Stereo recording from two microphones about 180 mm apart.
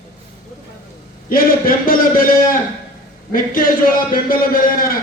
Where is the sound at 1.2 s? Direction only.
50° left (ahead or behind).